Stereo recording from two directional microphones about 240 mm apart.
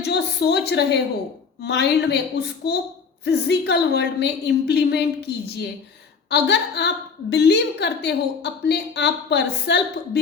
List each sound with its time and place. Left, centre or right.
0.0 s a woman's voice: left